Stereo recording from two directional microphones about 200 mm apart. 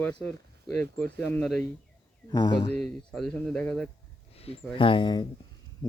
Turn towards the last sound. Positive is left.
turn(degrees=20)  # may be behind; listen again after turning